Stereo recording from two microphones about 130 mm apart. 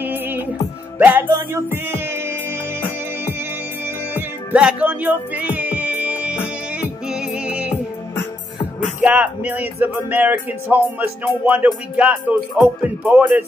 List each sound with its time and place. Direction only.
0.0 s music: 15° right (ahead or behind)
3.8 s music: 15° right (ahead or behind)
9.0 s music: 10° right (ahead or behind)